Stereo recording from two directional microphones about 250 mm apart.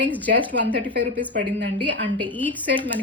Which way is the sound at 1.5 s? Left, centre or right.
Right.